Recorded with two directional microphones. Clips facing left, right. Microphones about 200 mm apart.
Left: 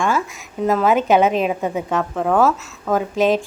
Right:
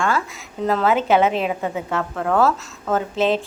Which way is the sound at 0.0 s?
15° left (ahead or behind).